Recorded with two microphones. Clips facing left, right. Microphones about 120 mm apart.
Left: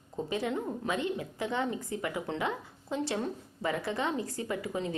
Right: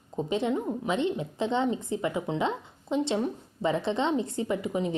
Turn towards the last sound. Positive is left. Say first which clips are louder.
# right 5 dB
turn(degrees=-20)  # may be behind; listen again after turning